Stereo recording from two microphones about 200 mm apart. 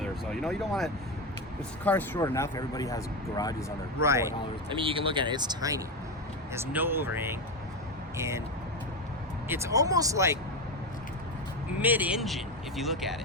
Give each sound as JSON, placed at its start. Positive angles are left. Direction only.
{"t": 0.0, "sound": "speech", "side_deg": 0}
{"t": 4.0, "sound": "speech", "side_deg": -15}
{"t": 4.7, "sound": "speech", "side_deg": -25}
{"t": 9.5, "sound": "speech", "side_deg": -15}
{"t": 11.8, "sound": "speech", "side_deg": -10}